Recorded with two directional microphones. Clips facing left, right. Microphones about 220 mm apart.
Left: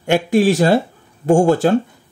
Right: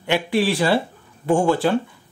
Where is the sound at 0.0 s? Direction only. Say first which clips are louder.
Left 6 dB; 45° left (ahead or behind).